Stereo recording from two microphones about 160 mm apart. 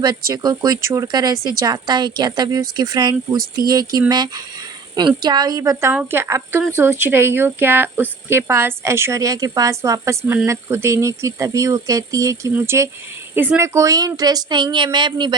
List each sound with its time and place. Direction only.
0.3 s speech: 25° right (ahead or behind)